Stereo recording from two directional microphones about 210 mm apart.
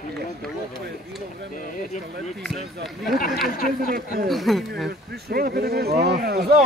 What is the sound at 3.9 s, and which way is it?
Speech, 45° right (ahead or behind).